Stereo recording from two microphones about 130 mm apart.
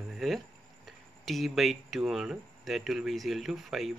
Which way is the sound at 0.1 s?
Centre (ahead or behind).